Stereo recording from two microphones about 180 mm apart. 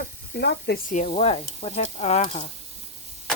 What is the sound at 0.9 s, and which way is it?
Speech, 40° left (ahead or behind).